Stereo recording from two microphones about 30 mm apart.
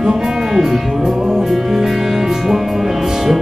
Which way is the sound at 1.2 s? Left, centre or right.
Centre.